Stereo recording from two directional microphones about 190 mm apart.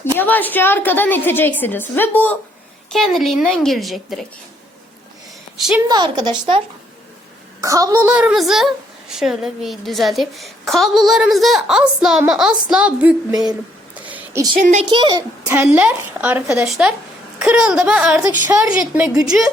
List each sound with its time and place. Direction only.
0.0 s a woman's voice: 10° left (ahead or behind)
5.5 s a woman's voice: 5° right (ahead or behind)
5.9 s a woman's voice: 20° right (ahead or behind)
7.6 s a woman's voice: 15° right (ahead or behind)
8.0 s a woman's voice: 5° right (ahead or behind)
14.0 s a sound: 10° right (ahead or behind)
14.5 s a woman's voice: 40° right (ahead or behind)
14.8 s a woman's voice: 25° right (ahead or behind)
15.6 s a woman's voice: 5° right (ahead or behind)